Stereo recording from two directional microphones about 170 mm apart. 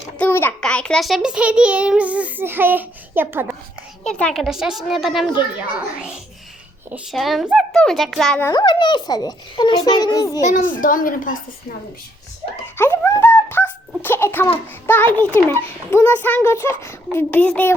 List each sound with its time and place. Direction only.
0.2 s a sound: 10° left (ahead or behind)
0.6 s a child's voice: 5° left (ahead or behind); by 3.5 s 10° right (ahead or behind)
4.0 s a child's voice: 5° left (ahead or behind)
6.9 s a child's voice: centre (ahead or behind)
8.4 s a child's voice: 15° left (ahead or behind)
8.6 s a child's voice: 25° left (ahead or behind)
10.4 s a child's voice: 50° left (ahead or behind)
12.7 s a sound: 15° left (ahead or behind)
14.8 s a child's voice: 10° left (ahead or behind)